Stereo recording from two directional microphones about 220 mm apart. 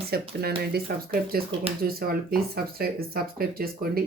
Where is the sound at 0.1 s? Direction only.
45° right (ahead or behind).